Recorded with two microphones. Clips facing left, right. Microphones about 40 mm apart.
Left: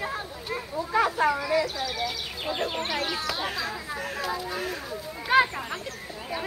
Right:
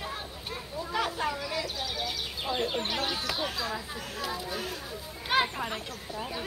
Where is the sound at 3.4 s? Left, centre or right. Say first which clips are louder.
Left 3 dB; left.